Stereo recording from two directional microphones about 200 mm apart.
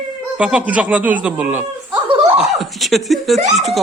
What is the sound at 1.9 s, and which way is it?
Laughter, 25° right (ahead or behind).